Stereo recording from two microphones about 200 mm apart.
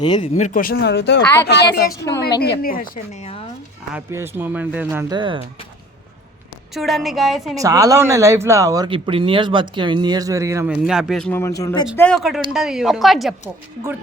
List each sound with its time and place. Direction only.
0.0 s speech: 25° left (ahead or behind)
0.3 s speech: 40° left (ahead or behind); by 1.2 s 60° left (ahead or behind)
1.2 s speech: 10° left (ahead or behind)
1.5 s a woman's voice: 55° left (ahead or behind); by 3.4 s 30° left (ahead or behind)
3.9 s speech: 10° right (ahead or behind)
6.7 s a woman's voice: centre (ahead or behind)
7.5 s speech: 15° right (ahead or behind)
10.7 s a woman's voice: centre (ahead or behind)
11.3 s speech: 15° left (ahead or behind)
11.9 s a woman's voice: 5° left (ahead or behind)